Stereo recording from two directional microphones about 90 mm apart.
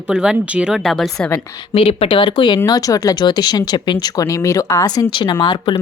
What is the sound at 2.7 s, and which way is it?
Speech, 45° left (ahead or behind).